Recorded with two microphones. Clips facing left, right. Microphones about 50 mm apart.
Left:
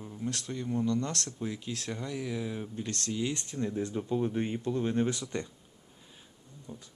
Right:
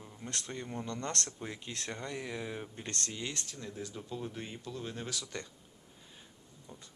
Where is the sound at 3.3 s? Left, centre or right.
Left.